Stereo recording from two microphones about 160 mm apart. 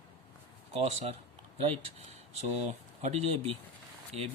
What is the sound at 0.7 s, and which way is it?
Speech, 40° right (ahead or behind).